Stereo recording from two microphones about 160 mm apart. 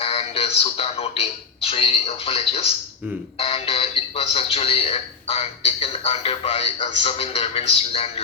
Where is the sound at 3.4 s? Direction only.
40° left (ahead or behind).